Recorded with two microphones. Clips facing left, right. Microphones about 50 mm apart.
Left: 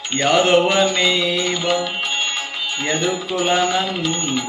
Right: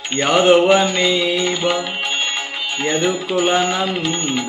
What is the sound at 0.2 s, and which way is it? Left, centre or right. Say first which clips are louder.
Speech: right 2 dB; right.